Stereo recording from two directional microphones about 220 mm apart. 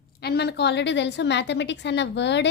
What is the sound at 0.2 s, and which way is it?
A woman's voice, 45° left (ahead or behind).